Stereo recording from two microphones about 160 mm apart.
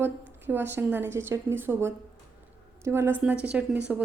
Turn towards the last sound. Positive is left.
turn(degrees=-10)  # may be behind; listen again after turning